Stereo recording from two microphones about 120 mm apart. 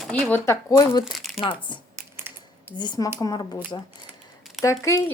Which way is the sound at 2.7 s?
35° left (ahead or behind).